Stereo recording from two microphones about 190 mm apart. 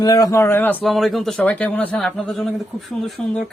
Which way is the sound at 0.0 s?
20° left (ahead or behind).